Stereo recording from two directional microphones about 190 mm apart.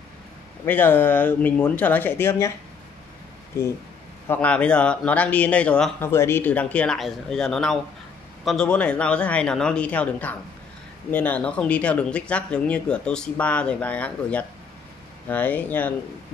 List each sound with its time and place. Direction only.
0.7 s speech: 10° left (ahead or behind)
4.3 s speech: 5° left (ahead or behind)